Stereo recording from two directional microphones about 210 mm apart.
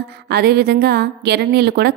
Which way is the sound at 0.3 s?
50° right (ahead or behind).